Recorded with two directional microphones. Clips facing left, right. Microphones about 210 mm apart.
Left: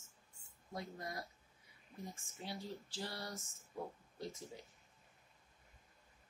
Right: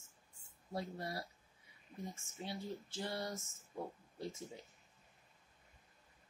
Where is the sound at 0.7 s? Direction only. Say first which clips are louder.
Right 3 dB; 30° right (ahead or behind).